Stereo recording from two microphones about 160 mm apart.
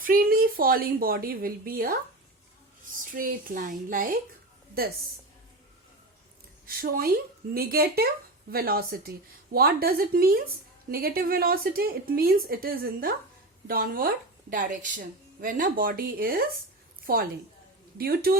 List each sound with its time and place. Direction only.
0.0 s a woman's voice: 65° right (ahead or behind)
3.1 s a woman's voice: 60° right (ahead or behind)
6.7 s speech: 65° right (ahead or behind)
14.5 s a woman's voice: 55° right (ahead or behind)
17.9 s a woman's voice: 75° right (ahead or behind)